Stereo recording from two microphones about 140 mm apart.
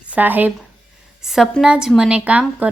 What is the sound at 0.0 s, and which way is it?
Speech, 10° right (ahead or behind).